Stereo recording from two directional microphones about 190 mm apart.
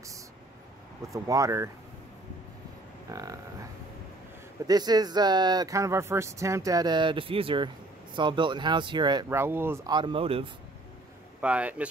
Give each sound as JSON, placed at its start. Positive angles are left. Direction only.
{"t": 1.1, "sound": "speech", "side_deg": -15}
{"t": 3.1, "sound": "speech", "side_deg": -20}
{"t": 4.6, "sound": "speech", "side_deg": -20}
{"t": 9.9, "sound": "speech", "side_deg": -25}
{"t": 11.4, "sound": "speech", "side_deg": -5}